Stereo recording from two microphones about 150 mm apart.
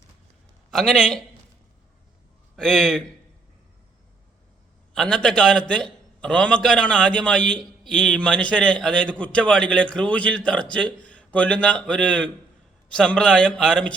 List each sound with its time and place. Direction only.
0.7 s speech: centre (ahead or behind)
2.6 s speech: 5° left (ahead or behind)
4.9 s a man's voice: 5° left (ahead or behind)